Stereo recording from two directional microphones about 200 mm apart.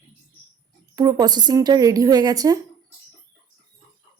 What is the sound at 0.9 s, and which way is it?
A woman's voice, 20° right (ahead or behind).